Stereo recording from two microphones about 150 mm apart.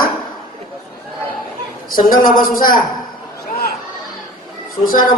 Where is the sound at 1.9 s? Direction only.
70° left (ahead or behind).